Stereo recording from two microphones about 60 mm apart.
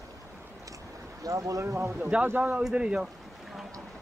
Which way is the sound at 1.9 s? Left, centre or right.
Right.